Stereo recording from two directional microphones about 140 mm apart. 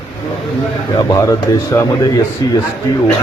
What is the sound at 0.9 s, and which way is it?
Speech, 25° left (ahead or behind).